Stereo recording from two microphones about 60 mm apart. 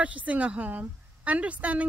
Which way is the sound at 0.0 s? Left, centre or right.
Right.